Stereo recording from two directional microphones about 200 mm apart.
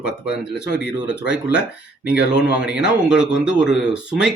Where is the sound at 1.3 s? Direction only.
5° right (ahead or behind).